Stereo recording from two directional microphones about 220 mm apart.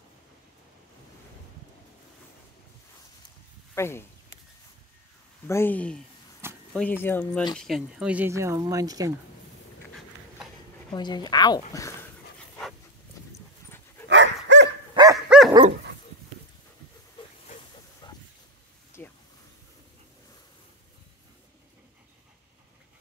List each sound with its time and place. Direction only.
3.7 s speech: 10° left (ahead or behind)
5.5 s speech: 10° left (ahead or behind); by 9.1 s 15° right (ahead or behind)
10.9 s speech: 20° left (ahead or behind)
14.0 s dog: 55° right (ahead or behind)
15.2 s dog: centre (ahead or behind)
18.0 s vehicle: 20° left (ahead or behind)
19.0 s a sound: 5° left (ahead or behind)